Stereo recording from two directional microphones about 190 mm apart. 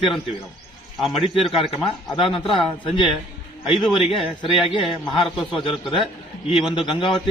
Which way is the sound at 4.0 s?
30° left (ahead or behind).